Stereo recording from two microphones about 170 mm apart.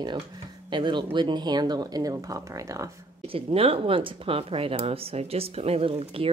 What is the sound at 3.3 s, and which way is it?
Speech, 35° right (ahead or behind).